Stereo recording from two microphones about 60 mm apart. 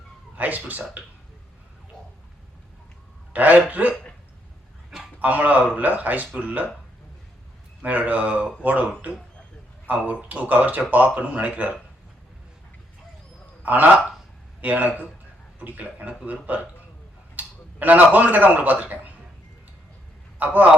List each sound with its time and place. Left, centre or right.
0.3 s speech: right
3.3 s speech: right
5.2 s speech: right
7.8 s speech: right
13.6 s a man's voice: right
20.4 s speech: right